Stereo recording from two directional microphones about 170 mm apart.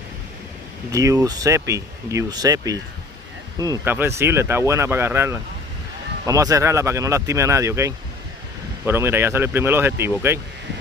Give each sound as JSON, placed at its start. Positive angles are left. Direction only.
{"t": 0.9, "sound": "speech", "side_deg": -20}